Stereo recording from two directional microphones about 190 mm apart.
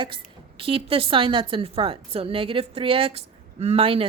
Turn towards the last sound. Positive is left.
turn(degrees=-30)  # may be behind; listen again after turning